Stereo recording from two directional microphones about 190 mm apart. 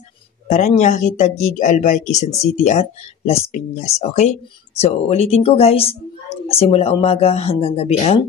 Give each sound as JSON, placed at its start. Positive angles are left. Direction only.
{"t": 0.5, "sound": "speech", "side_deg": 40}